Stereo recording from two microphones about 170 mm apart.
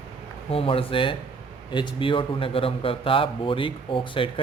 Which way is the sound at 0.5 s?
35° left (ahead or behind).